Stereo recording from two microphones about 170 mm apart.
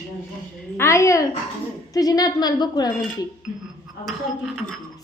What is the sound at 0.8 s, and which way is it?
A woman's voice, 15° left (ahead or behind).